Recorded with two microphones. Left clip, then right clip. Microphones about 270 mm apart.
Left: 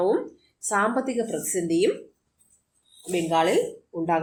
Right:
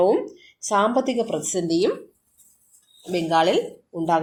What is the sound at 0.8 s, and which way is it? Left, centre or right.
Speech, right.